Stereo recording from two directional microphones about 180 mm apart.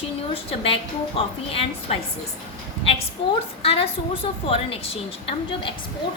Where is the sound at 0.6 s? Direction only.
30° left (ahead or behind).